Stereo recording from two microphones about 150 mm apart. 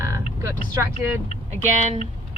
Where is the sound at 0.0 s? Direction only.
20° right (ahead or behind).